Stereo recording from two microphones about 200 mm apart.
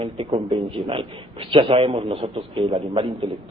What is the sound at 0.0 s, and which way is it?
A man's voice, 25° right (ahead or behind).